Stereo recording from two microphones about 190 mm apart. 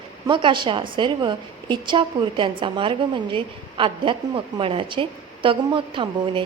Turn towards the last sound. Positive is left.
turn(degrees=-25)  # may be behind; listen again after turning